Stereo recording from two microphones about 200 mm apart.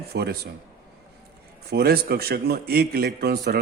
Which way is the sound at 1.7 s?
50° right (ahead or behind).